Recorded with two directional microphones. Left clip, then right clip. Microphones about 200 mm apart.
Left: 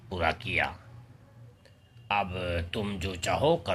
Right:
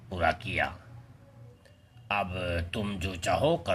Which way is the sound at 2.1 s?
Centre (ahead or behind).